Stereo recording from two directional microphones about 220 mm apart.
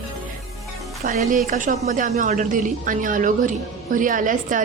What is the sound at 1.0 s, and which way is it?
A woman's voice, 35° right (ahead or behind).